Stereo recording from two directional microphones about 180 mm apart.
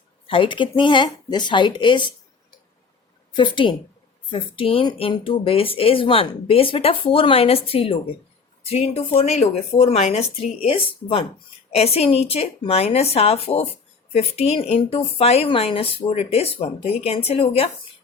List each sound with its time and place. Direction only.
0.3 s speech: 25° left (ahead or behind)
3.3 s speech: 25° left (ahead or behind)